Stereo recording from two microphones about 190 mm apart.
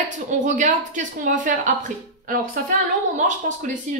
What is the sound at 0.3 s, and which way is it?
A woman's voice, 40° right (ahead or behind).